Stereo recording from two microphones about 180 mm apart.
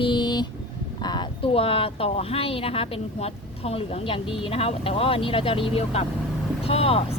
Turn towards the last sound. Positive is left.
turn(degrees=35)  # may be behind; listen again after turning